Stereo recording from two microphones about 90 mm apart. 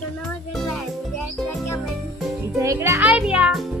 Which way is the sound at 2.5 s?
30° right (ahead or behind).